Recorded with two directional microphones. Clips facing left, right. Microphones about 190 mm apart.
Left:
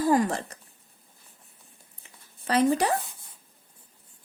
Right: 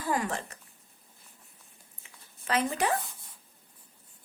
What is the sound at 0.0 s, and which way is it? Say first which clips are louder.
Speech: left 8 dB; 40° left (ahead or behind).